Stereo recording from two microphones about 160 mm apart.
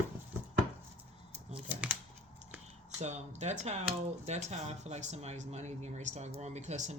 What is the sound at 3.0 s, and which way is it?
Speech, 45° right (ahead or behind).